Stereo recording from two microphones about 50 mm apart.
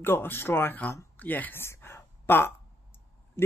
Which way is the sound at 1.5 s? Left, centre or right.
Left.